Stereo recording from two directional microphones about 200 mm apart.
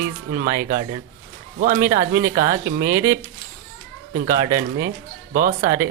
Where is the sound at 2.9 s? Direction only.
15° right (ahead or behind).